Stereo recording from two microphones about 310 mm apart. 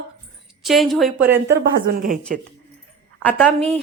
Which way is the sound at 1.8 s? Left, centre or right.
Right.